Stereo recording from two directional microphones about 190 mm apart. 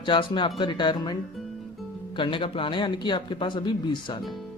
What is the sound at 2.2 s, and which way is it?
Speech, 25° left (ahead or behind).